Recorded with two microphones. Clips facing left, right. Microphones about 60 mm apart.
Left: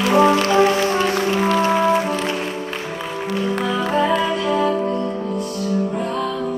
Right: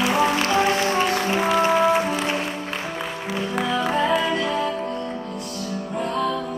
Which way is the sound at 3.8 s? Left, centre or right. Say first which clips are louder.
Left 4 dB; centre.